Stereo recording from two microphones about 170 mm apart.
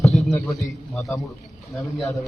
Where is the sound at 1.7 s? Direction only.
20° left (ahead or behind).